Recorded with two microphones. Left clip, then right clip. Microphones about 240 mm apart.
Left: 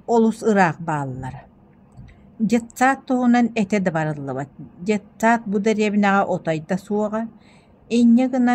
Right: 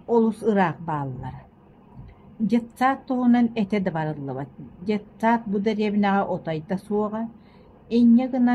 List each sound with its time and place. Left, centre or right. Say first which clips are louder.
0.1 s a woman's voice: left 3 dB; left
2.4 s a woman's voice: left 4 dB; left